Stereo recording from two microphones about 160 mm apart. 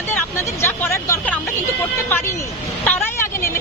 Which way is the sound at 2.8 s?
10° left (ahead or behind).